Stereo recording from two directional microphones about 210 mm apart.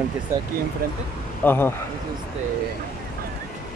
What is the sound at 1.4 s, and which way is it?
Speech, 10° left (ahead or behind).